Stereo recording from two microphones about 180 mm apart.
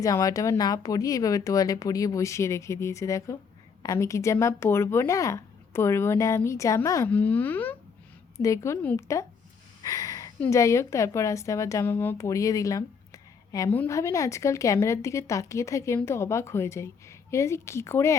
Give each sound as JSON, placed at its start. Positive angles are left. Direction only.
{"t": 0.0, "sound": "a woman's voice", "side_deg": 20}